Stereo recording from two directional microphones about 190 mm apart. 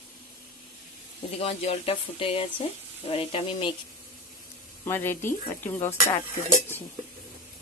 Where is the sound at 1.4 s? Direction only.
35° left (ahead or behind).